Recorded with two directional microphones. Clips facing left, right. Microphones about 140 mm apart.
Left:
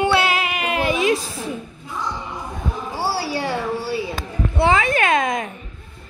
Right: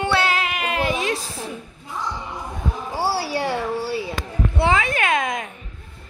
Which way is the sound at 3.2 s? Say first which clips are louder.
Even; 50° right (ahead or behind).